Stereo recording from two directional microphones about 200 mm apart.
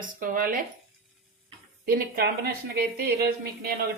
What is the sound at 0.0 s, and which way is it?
Speech, 45° right (ahead or behind).